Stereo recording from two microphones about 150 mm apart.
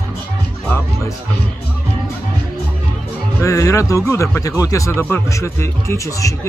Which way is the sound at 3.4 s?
20° left (ahead or behind).